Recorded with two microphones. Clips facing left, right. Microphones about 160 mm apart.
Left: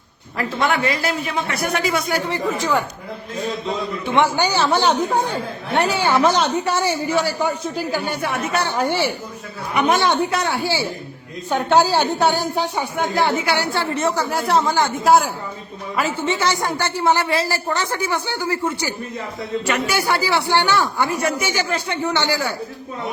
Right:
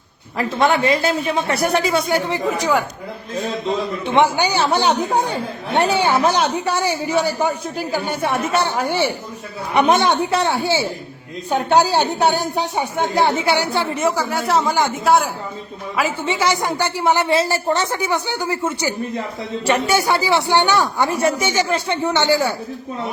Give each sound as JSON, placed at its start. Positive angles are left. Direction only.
{"t": 0.3, "sound": "a man's voice", "side_deg": -30}
{"t": 4.1, "sound": "a man's voice", "side_deg": -15}
{"t": 12.8, "sound": "a man's voice", "side_deg": -20}
{"t": 14.3, "sound": "speech", "side_deg": 0}
{"t": 14.7, "sound": "a man's voice", "side_deg": -15}
{"t": 15.0, "sound": "speech", "side_deg": 0}
{"t": 16.0, "sound": "a man's voice", "side_deg": -15}